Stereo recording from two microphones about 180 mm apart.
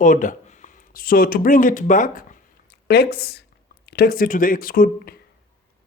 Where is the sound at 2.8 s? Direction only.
65° left (ahead or behind).